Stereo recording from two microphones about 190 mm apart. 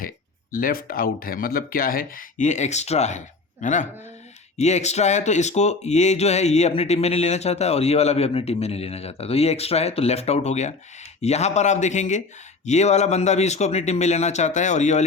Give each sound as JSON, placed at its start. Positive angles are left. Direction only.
{"t": 0.5, "sound": "speech", "side_deg": 50}